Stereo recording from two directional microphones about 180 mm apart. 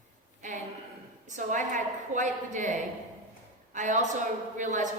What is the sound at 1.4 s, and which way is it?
A woman's voice, 45° right (ahead or behind).